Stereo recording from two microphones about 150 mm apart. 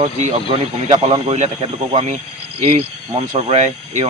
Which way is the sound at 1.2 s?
50° right (ahead or behind).